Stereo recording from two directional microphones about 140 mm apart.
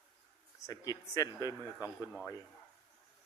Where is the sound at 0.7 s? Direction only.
25° left (ahead or behind).